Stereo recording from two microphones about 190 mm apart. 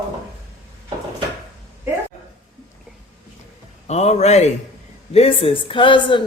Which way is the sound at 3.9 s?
35° left (ahead or behind).